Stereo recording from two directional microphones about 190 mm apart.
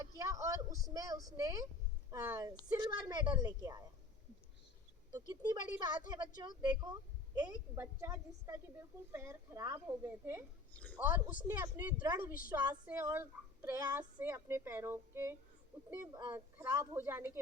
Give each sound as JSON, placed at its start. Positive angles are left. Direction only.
{"t": 0.0, "sound": "a sound", "side_deg": -15}
{"t": 0.9, "sound": "speech", "side_deg": -20}
{"t": 5.1, "sound": "speech", "side_deg": -20}